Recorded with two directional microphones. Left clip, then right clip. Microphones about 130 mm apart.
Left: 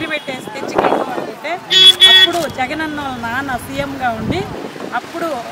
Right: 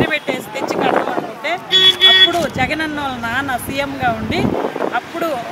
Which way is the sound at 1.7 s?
30° left (ahead or behind).